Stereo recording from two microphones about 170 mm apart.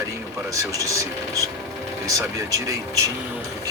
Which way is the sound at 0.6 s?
20° right (ahead or behind).